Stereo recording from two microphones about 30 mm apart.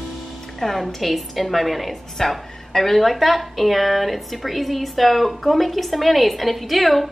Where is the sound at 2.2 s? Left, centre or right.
Centre.